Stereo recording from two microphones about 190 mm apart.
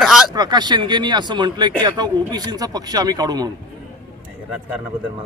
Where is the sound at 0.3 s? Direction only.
20° right (ahead or behind).